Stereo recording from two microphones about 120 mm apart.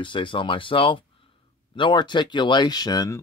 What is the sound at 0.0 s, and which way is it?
Speech, 45° left (ahead or behind).